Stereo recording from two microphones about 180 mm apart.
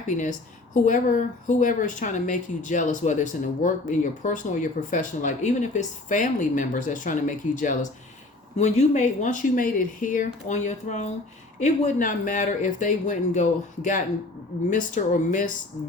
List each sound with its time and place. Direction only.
0.9 s speech: 45° left (ahead or behind)